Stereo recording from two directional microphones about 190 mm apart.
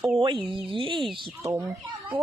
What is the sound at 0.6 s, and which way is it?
Speech, 25° right (ahead or behind).